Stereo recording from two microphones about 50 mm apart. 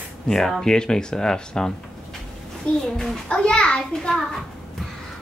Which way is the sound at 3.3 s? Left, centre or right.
Centre.